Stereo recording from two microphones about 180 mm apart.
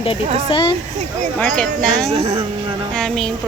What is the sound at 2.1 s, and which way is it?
Speech, 35° right (ahead or behind).